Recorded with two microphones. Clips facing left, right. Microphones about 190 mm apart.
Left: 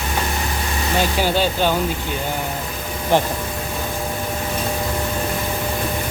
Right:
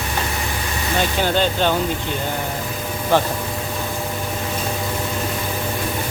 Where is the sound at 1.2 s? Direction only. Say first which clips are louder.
Right 2 dB; 10° left (ahead or behind).